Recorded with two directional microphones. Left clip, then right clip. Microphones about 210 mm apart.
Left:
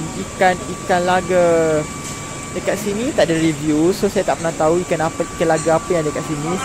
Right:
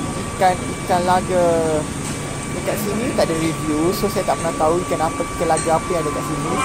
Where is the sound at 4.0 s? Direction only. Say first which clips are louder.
Left 2 dB; 25° left (ahead or behind).